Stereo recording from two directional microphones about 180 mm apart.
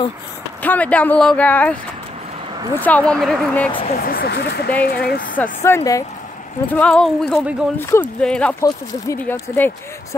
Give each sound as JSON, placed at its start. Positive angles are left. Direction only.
{"t": 0.6, "sound": "speech", "side_deg": 10}
{"t": 3.9, "sound": "speech", "side_deg": 55}
{"t": 5.4, "sound": "speech", "side_deg": 15}
{"t": 6.7, "sound": "speech", "side_deg": 5}
{"t": 8.6, "sound": "speech", "side_deg": 15}